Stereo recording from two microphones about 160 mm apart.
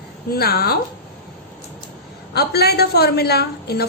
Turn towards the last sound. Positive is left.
turn(degrees=85)